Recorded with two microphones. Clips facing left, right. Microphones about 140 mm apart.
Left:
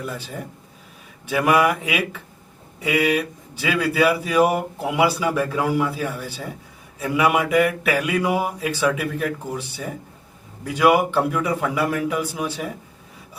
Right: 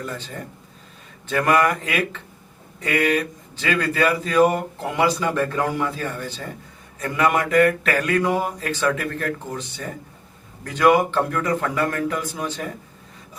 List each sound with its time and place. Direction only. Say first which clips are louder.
0.0 s speech: left 1 dB; 10° left (ahead or behind)